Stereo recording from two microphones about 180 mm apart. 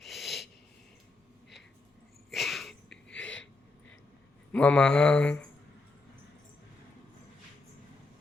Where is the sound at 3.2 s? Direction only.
90° left.